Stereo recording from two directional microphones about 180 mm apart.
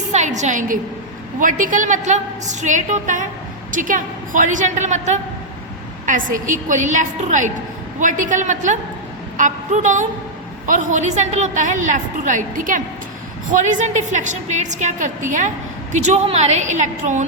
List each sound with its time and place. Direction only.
0.1 s a woman's voice: 40° right (ahead or behind)